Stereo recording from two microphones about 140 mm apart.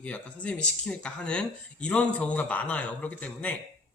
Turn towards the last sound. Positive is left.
turn(degrees=10)  # may be behind; listen again after turning